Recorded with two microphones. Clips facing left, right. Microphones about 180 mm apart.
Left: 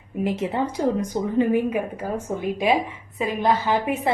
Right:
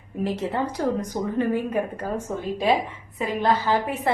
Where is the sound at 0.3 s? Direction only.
20° left (ahead or behind).